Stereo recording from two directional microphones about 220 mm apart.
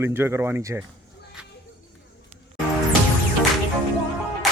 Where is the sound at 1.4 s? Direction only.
5° right (ahead or behind).